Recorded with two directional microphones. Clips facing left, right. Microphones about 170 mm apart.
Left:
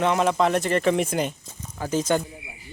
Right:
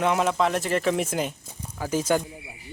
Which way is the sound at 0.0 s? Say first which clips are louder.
Left 2 dB; 5° right (ahead or behind).